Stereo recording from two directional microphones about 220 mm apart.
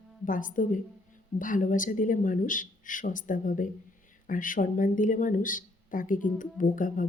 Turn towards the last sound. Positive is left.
turn(degrees=35)  # may be behind; listen again after turning